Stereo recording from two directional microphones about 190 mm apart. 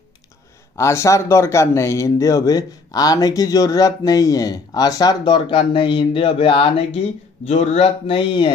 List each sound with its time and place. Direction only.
0.7 s speech: 15° left (ahead or behind)